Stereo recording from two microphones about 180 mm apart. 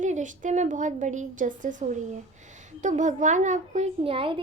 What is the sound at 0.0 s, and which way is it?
A child's voice, 45° right (ahead or behind).